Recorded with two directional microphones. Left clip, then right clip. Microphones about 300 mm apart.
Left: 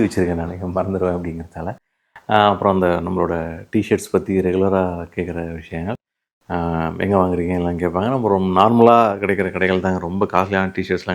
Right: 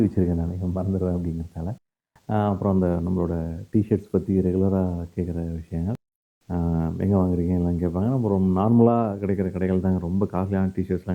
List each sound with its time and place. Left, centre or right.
0.0 s speech: centre